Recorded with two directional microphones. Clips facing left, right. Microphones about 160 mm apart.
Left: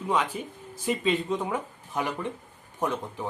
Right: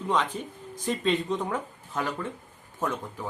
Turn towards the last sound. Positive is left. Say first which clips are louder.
# left 2 dB
turn(degrees=20)  # may be behind; listen again after turning